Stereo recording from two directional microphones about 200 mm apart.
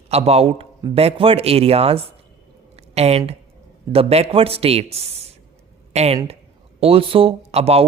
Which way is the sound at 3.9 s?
30° right (ahead or behind).